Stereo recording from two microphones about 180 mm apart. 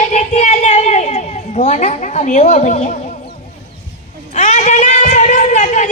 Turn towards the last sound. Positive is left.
turn(degrees=45)  # may be behind; listen again after turning